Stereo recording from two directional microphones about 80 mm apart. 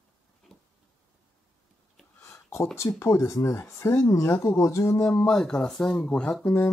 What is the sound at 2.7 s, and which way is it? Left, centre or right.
Speech, left.